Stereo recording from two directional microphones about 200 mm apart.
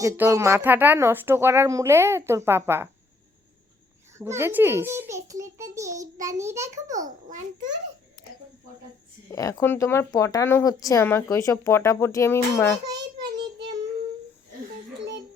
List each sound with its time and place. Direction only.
0.2 s speech: 15° right (ahead or behind)
4.2 s speech: 10° right (ahead or behind)
6.9 s a child's voice: 40° right (ahead or behind)
9.3 s speech: 15° left (ahead or behind)
12.8 s child singing: 55° right (ahead or behind)
14.9 s a sound: 65° right (ahead or behind)